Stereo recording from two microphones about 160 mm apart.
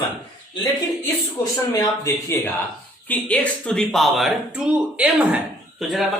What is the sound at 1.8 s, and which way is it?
Speech, 20° left (ahead or behind).